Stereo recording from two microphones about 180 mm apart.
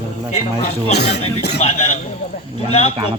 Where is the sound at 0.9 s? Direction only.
65° left (ahead or behind).